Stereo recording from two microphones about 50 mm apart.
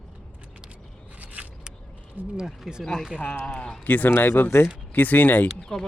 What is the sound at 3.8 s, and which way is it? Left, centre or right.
Speech, left.